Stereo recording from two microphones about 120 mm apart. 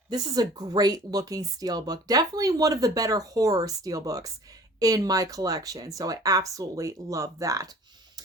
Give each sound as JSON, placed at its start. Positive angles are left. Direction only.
{"t": 0.1, "sound": "speech", "side_deg": -35}